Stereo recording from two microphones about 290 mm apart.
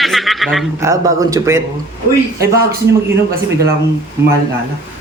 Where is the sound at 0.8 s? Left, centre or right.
Centre.